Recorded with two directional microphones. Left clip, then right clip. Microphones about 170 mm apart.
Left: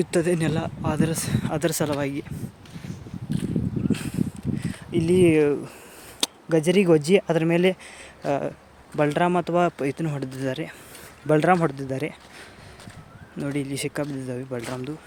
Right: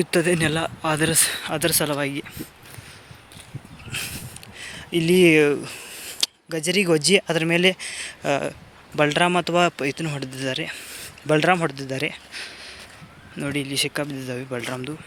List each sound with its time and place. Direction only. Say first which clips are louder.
0.0 s a man's voice: right 3 dB; 5° left (ahead or behind)
1.5 s speech: right 1 dB; 20° left (ahead or behind)
4.5 s a man's voice: right 3 dB; 5° left (ahead or behind)